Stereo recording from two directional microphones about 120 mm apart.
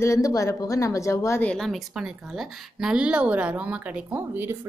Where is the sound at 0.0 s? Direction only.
25° left (ahead or behind).